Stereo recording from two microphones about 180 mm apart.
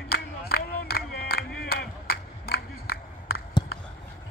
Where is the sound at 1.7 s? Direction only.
55° left (ahead or behind).